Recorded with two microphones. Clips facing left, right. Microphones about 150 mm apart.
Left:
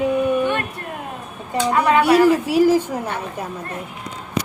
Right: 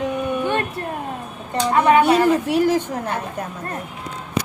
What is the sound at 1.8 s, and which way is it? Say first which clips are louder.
Speech: left 1 dB; 25° right (ahead or behind).